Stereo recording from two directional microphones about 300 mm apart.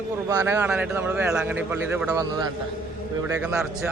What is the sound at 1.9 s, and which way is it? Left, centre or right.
Speech, centre.